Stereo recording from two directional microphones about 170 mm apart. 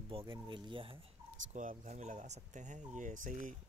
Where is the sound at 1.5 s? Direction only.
50° right (ahead or behind).